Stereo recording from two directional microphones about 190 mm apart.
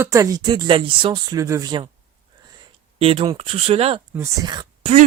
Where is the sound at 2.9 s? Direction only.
30° right (ahead or behind).